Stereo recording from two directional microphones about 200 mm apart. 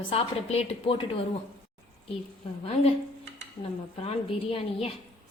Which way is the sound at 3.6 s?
30° left (ahead or behind).